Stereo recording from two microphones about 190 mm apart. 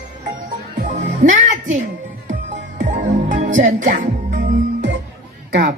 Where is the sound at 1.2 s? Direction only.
40° right (ahead or behind).